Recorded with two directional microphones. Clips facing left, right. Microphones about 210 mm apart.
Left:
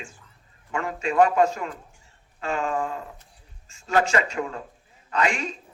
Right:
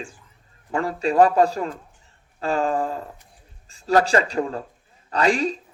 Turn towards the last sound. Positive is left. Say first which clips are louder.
# right 5 dB
turn(degrees=-35)  # may be behind; listen again after turning